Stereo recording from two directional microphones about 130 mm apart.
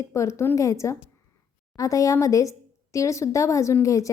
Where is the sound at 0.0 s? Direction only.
25° left (ahead or behind).